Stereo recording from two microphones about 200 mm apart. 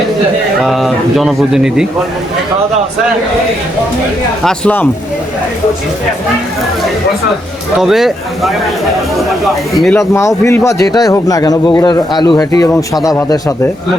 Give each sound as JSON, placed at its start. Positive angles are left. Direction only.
{"t": 0.6, "sound": "speech", "side_deg": 0}
{"t": 4.4, "sound": "speech", "side_deg": 5}
{"t": 7.8, "sound": "speech", "side_deg": 0}
{"t": 9.7, "sound": "speech", "side_deg": 0}
{"t": 10.0, "sound": "a man's voice", "side_deg": 15}